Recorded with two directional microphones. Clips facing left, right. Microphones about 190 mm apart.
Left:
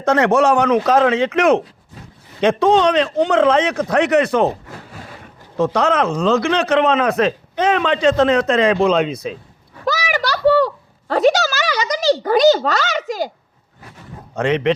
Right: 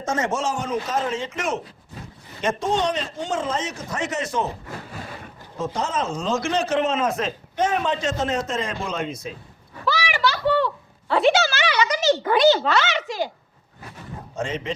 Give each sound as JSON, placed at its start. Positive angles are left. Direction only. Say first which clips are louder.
{"t": 0.0, "sound": "a man's voice", "louder": "left 10 dB", "side_deg": 65}
{"t": 5.5, "sound": "speech", "louder": "left 9 dB", "side_deg": 70}
{"t": 9.8, "sound": "a sound", "louder": "left 3 dB", "side_deg": 40}
{"t": 14.3, "sound": "speech", "louder": "left 10 dB", "side_deg": 65}